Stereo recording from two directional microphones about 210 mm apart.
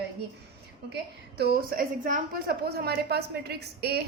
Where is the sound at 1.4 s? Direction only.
45° right (ahead or behind).